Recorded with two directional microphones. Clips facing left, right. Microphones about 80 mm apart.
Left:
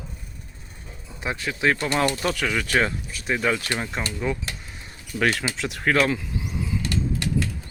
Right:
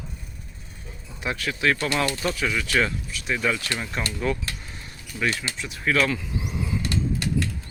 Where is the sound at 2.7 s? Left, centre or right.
Left.